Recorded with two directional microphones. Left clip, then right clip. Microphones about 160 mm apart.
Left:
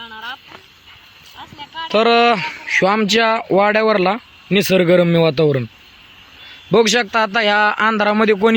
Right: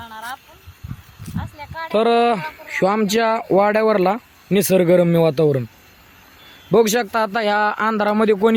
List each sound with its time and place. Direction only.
0.0 s a sound: 35° right (ahead or behind)
1.9 s speech: 5° right (ahead or behind)
6.7 s a man's voice: 5° right (ahead or behind)